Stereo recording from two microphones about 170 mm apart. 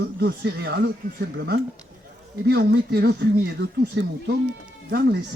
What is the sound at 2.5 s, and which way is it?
Speech, 65° right (ahead or behind).